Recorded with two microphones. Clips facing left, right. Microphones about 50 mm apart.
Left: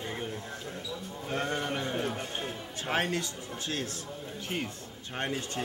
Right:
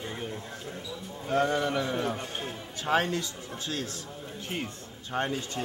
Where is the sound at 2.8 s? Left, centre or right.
Left.